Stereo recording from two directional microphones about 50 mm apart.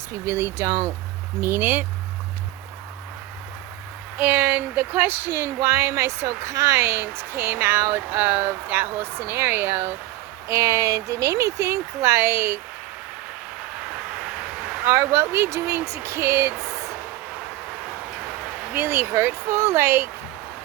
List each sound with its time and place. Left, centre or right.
0.1 s speech: right
0.7 s speech: right
1.4 s speech: right
1.6 s speech: right
4.2 s speech: right
4.7 s speech: right
4.9 s speech: right
10.5 s speech: right
14.8 s speech: right
18.7 s speech: right